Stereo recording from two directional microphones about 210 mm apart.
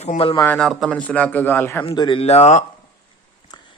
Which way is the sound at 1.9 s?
25° left (ahead or behind).